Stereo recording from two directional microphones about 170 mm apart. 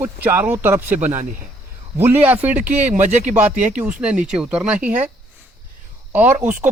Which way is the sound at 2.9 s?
45° right (ahead or behind).